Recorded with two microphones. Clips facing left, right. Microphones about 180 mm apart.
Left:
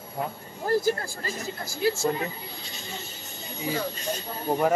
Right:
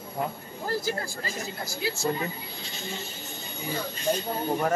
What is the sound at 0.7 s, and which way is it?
A man's voice, 50° left (ahead or behind).